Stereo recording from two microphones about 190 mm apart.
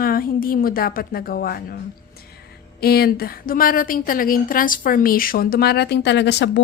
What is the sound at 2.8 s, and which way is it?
A woman's voice, 55° left (ahead or behind).